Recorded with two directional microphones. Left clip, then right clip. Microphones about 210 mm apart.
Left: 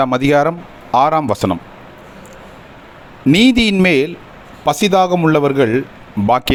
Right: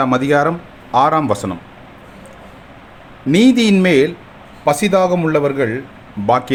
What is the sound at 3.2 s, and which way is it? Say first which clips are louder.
A man's voice: left 1 dB; 40° left (ahead or behind).